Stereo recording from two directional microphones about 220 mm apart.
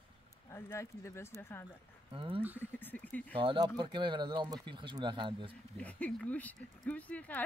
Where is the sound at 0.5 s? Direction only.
10° left (ahead or behind).